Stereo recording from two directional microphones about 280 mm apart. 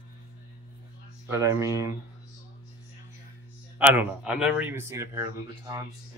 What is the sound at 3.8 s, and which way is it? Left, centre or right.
Speech, centre.